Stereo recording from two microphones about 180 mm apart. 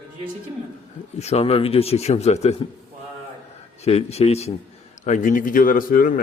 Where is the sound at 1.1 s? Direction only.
35° left (ahead or behind).